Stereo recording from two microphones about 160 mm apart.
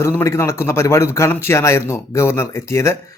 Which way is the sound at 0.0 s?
15° left (ahead or behind).